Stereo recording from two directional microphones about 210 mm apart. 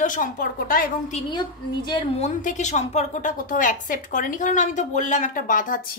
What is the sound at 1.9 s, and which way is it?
A woman's voice, 30° left (ahead or behind).